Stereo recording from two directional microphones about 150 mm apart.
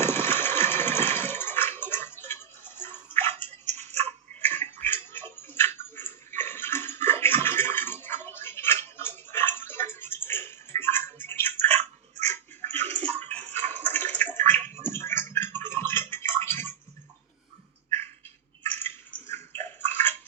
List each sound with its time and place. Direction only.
0.0 s a sound: 15° left (ahead or behind)
3.7 s tick-tock: 50° right (ahead or behind)
4.4 s tick-tock: 10° left (ahead or behind)
12.3 s bathtub: 15° left (ahead or behind)
18.6 s bathtub: 15° left (ahead or behind)